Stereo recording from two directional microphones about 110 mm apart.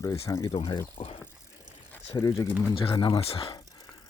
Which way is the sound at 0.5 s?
55° left (ahead or behind).